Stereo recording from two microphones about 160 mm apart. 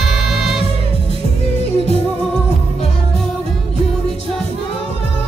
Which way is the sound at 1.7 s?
40° left (ahead or behind).